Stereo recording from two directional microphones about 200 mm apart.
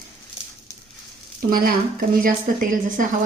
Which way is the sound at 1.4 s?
45° right (ahead or behind).